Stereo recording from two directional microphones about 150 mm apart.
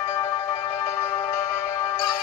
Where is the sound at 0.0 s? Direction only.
15° left (ahead or behind).